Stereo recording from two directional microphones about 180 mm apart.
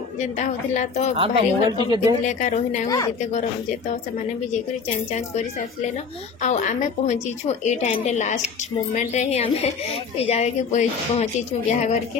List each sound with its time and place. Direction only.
0.4 s speech: 40° left (ahead or behind)
1.1 s a woman's voice: 30° right (ahead or behind)
2.2 s speech: 45° left (ahead or behind)
5.1 s a woman's voice: 40° left (ahead or behind)